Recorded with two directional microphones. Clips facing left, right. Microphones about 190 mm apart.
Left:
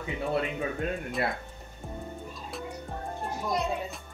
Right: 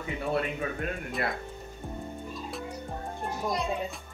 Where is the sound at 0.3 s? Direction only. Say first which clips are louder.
Even; 15° left (ahead or behind).